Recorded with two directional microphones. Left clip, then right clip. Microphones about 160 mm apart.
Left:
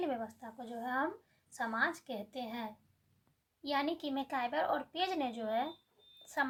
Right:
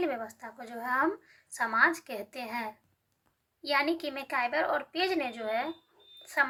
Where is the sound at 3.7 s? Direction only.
30° left (ahead or behind).